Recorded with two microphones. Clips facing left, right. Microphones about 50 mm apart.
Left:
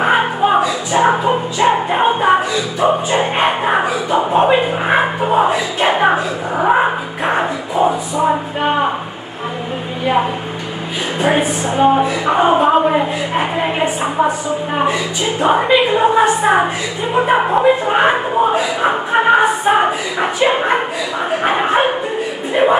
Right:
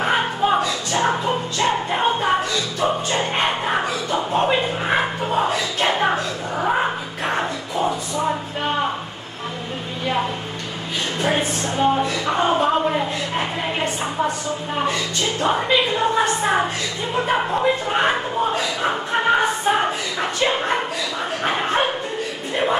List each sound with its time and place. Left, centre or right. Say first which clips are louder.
0.0 s music: left 6 dB; centre
4.3 s speech: left 6 dB; centre
11.1 s speech: left 7 dB; centre
22.5 s music: left 8 dB; centre